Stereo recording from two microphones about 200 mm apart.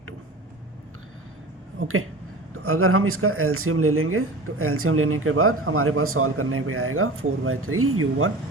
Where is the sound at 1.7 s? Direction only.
90° right.